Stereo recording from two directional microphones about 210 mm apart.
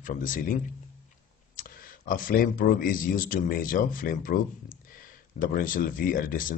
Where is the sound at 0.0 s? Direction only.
40° left (ahead or behind).